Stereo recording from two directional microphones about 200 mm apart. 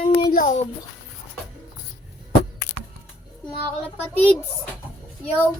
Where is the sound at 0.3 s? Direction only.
40° left (ahead or behind).